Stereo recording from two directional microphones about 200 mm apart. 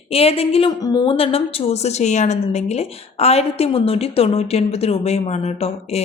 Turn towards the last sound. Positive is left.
turn(degrees=30)  # may be behind; listen again after turning